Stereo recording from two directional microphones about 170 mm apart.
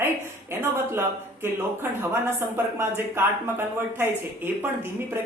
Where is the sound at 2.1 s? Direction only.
15° right (ahead or behind).